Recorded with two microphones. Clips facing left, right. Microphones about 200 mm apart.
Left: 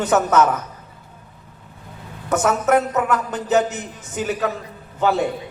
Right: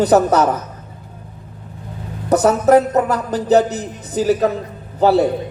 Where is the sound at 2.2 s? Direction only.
35° right (ahead or behind).